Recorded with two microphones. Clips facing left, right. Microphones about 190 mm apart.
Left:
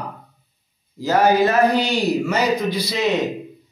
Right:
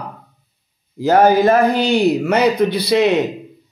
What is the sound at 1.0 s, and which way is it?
Speech, 55° right (ahead or behind).